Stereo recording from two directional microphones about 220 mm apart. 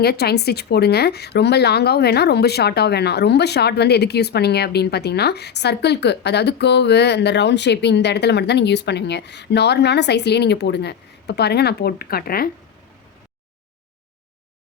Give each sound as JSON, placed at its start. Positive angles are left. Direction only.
{"t": 0.0, "sound": "a woman's voice", "side_deg": 45}